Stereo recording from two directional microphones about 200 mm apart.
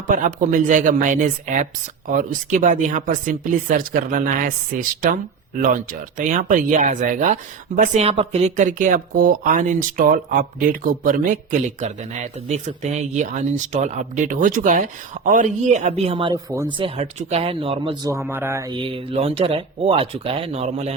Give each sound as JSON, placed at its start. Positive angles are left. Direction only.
{"t": 0.1, "sound": "speech", "side_deg": -40}
{"t": 18.2, "sound": "speech", "side_deg": -10}